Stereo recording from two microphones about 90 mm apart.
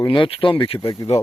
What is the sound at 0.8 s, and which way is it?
Speech, 40° left (ahead or behind).